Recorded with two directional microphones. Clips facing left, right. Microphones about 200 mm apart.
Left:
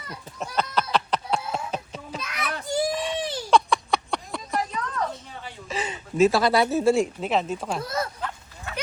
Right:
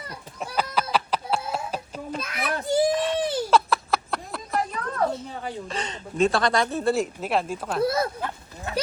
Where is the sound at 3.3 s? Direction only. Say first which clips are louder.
Left 3 dB; 5° right (ahead or behind).